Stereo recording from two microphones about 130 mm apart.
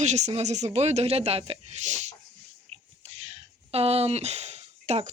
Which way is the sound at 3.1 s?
50° right (ahead or behind).